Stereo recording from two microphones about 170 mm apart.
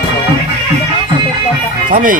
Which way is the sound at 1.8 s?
50° right (ahead or behind).